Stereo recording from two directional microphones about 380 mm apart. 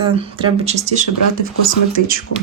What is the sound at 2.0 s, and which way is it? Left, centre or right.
Speech, right.